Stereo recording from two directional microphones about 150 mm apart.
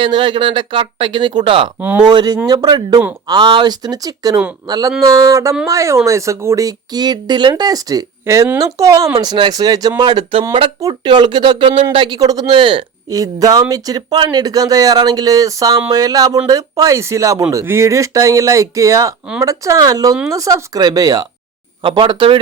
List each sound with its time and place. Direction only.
0.0 s speech: 30° right (ahead or behind)
1.8 s speech: 15° right (ahead or behind)
2.0 s speech: 30° right (ahead or behind)